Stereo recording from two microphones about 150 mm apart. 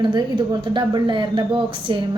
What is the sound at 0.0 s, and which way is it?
Speech, 30° right (ahead or behind).